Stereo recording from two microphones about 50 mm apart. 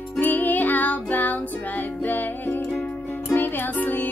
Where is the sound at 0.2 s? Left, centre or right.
Left.